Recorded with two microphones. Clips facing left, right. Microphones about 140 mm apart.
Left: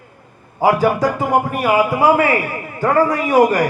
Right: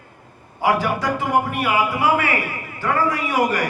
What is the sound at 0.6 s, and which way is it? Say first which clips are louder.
A man's voice: left 5 dB; 40° left (ahead or behind).